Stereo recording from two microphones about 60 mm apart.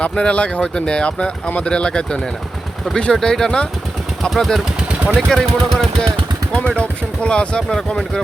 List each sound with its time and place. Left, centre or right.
0.0 s speech: centre